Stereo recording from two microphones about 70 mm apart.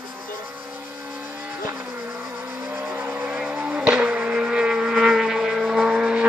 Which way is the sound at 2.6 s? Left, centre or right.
Right.